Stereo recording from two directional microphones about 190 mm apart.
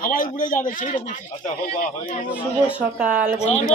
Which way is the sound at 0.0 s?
45° left (ahead or behind).